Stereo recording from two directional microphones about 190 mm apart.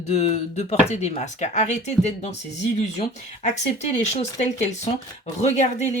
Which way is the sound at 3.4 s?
35° left (ahead or behind).